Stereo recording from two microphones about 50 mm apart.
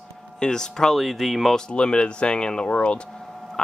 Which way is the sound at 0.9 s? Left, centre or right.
Centre.